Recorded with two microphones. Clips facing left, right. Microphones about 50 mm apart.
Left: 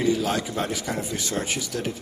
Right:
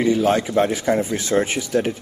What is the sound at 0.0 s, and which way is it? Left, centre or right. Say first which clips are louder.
Speech: right 6 dB; right.